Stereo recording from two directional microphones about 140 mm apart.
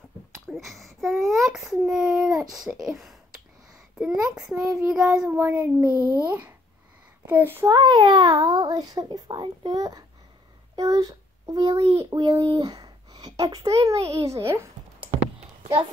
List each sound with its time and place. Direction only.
0.5 s a child's voice: centre (ahead or behind)
2.5 s child singing: 5° right (ahead or behind)
4.0 s a child's voice: 5° right (ahead or behind)
4.6 s child singing: 5° right (ahead or behind)
5.4 s a child's voice: 15° right (ahead or behind)
7.7 s a child's voice: 30° right (ahead or behind)